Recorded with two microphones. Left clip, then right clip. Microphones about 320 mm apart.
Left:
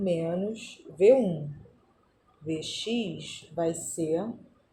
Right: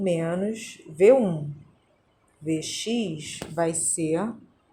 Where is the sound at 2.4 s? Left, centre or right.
Right.